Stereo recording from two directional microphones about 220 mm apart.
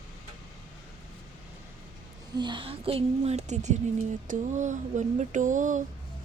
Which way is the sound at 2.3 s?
20° right (ahead or behind).